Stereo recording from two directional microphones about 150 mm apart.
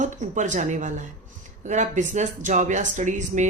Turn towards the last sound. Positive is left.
turn(degrees=-55)  # may be behind; listen again after turning